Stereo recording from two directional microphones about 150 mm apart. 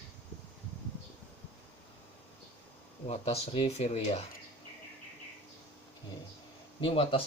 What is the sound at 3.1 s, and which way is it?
Speech, 45° left (ahead or behind).